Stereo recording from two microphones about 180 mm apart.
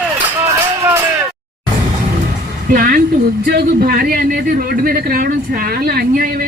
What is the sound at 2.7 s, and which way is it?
A man's voice, 55° right (ahead or behind).